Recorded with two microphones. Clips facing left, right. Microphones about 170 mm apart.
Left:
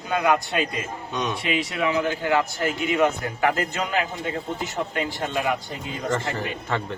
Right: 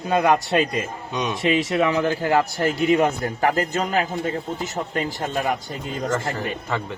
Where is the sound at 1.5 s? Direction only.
40° right (ahead or behind).